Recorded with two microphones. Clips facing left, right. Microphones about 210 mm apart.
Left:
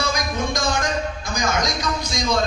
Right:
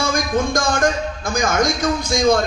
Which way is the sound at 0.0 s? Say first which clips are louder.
Right 5 dB; 50° right (ahead or behind).